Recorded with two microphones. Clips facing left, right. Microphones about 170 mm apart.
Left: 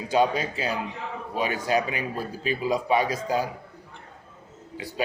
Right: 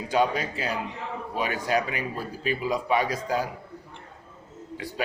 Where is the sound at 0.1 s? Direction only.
25° left (ahead or behind).